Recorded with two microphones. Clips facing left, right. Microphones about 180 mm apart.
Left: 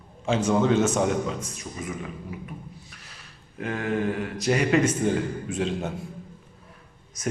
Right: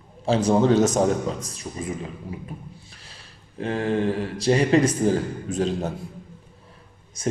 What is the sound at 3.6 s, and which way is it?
Speech, 30° right (ahead or behind).